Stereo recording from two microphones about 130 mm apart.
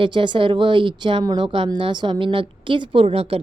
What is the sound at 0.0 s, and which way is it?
A woman's voice, 40° right (ahead or behind).